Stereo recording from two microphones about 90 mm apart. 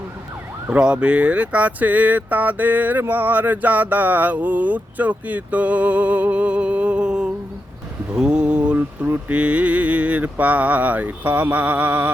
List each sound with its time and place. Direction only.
0.7 s speech: 10° right (ahead or behind)